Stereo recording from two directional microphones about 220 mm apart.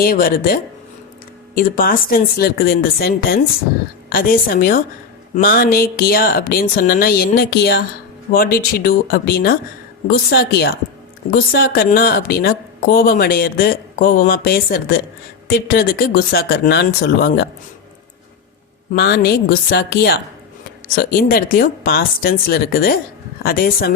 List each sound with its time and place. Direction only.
0.0 s a woman's voice: 40° left (ahead or behind)
18.9 s a woman's voice: 45° left (ahead or behind)